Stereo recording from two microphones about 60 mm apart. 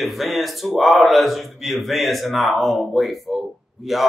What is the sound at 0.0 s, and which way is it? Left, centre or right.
Speech, centre.